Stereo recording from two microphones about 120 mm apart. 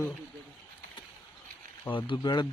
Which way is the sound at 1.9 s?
45° left (ahead or behind).